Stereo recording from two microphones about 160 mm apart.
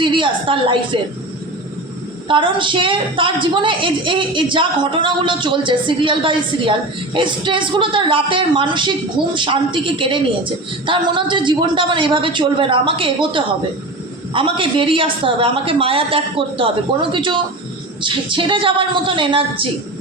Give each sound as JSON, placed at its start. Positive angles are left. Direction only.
{"t": 0.0, "sound": "a woman's voice", "side_deg": -30}
{"t": 2.2, "sound": "speech", "side_deg": -30}